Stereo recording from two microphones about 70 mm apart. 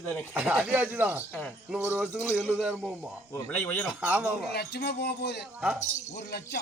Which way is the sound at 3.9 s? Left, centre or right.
Centre.